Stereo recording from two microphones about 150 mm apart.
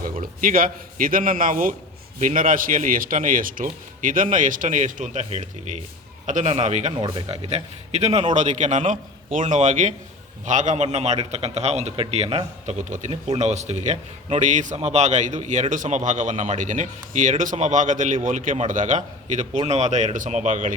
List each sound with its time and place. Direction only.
0.0 s a man's voice: 70° right (ahead or behind); by 6.9 s 50° right (ahead or behind)
6.9 s speech: 30° right (ahead or behind); by 20.7 s 55° right (ahead or behind)